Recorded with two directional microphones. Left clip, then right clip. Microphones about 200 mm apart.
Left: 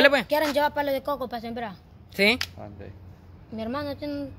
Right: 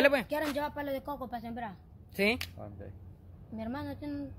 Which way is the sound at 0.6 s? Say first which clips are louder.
Left 11 dB; 45° left (ahead or behind).